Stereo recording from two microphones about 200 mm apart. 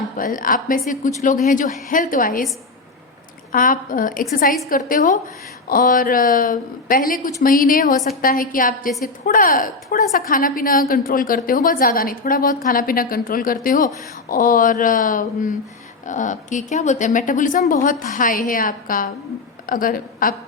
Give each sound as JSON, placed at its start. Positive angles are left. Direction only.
{"t": 0.2, "sound": "a woman's voice", "side_deg": 45}
{"t": 3.5, "sound": "a woman's voice", "side_deg": 45}